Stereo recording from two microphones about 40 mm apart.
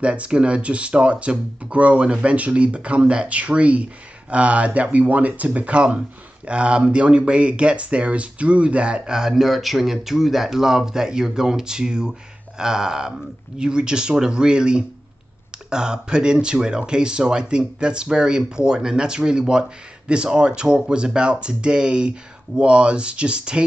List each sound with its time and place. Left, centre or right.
0.0 s speech: right
9.3 s speech: centre; by 23.6 s right